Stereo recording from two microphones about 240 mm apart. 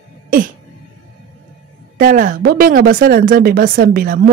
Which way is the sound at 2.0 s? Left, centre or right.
Right.